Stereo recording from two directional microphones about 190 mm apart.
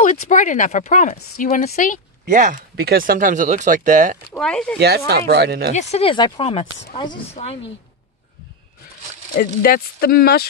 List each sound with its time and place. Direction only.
0.0 s speech: 40° left (ahead or behind)
2.2 s speech: 45° right (ahead or behind)
2.7 s speech: 55° right (ahead or behind)
4.3 s speech: 5° left (ahead or behind)
4.7 s speech: 55° right (ahead or behind)
5.8 s speech: 35° left (ahead or behind)
9.4 s speech: 50° left (ahead or behind)